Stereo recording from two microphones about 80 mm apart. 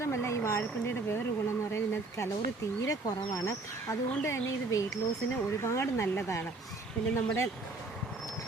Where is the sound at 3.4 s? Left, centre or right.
Left.